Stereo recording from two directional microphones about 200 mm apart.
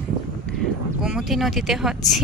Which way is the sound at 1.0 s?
5° right (ahead or behind).